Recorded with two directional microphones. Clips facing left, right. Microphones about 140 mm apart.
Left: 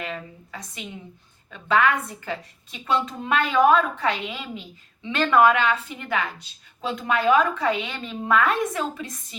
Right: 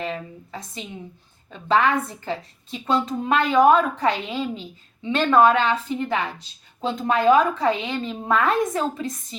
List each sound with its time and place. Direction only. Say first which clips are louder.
0.0 s a woman's voice: right 4 dB; 30° right (ahead or behind)